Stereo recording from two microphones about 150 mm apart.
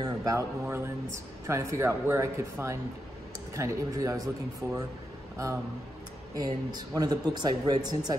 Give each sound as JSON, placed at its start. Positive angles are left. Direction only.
{"t": 0.0, "sound": "speech", "side_deg": -25}
{"t": 6.3, "sound": "speech", "side_deg": -25}